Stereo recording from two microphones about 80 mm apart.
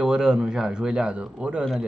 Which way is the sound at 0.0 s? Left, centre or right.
Centre.